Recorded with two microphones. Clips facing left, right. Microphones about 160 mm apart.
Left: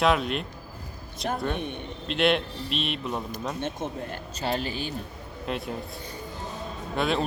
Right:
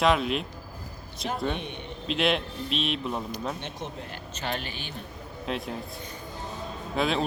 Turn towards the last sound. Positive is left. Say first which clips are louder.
# even
turn(degrees=0)  # may be behind; listen again after turning